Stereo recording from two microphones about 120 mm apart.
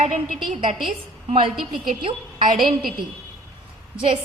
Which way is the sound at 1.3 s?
50° right (ahead or behind).